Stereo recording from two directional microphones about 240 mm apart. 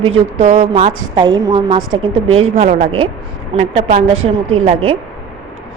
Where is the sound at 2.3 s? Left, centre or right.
Right.